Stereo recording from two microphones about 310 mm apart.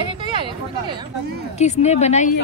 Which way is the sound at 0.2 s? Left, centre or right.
Centre.